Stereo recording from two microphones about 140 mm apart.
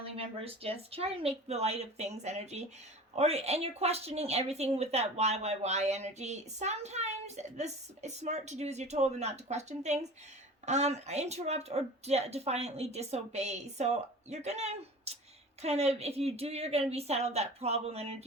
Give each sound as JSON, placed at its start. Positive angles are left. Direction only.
{"t": 0.0, "sound": "a woman's voice", "side_deg": -45}